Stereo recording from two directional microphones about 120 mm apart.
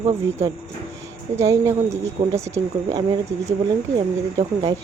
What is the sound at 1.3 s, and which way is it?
Speech, 25° right (ahead or behind).